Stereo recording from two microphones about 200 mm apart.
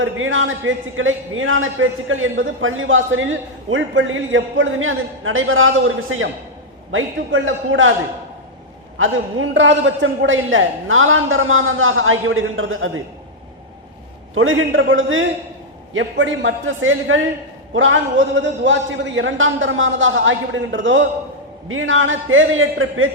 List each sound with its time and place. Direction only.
0.0 s a man's voice: 75° right (ahead or behind)
9.0 s a man's voice: 70° right (ahead or behind); by 12.9 s 90° right
14.3 s a man's voice: 85° right; by 21.0 s 65° right (ahead or behind)
21.7 s a man's voice: 80° right